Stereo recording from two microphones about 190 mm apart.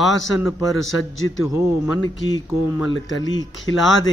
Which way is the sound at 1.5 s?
15° right (ahead or behind).